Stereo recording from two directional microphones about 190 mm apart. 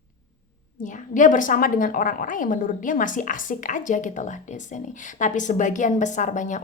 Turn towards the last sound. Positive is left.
turn(degrees=40)  # may be behind; listen again after turning